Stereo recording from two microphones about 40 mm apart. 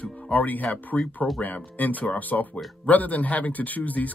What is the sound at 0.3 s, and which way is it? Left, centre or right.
Speech, left.